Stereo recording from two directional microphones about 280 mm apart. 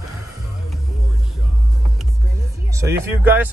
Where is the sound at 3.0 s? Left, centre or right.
Centre.